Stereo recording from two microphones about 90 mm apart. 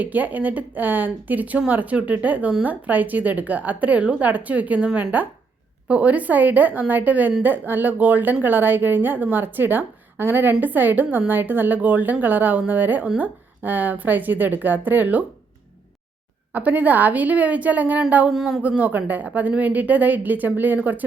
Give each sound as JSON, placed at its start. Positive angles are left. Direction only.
{"t": 0.0, "sound": "a woman's voice", "side_deg": -20}
{"t": 16.5, "sound": "speech", "side_deg": -20}
{"t": 18.3, "sound": "speech", "side_deg": -5}
{"t": 18.6, "sound": "speech", "side_deg": -15}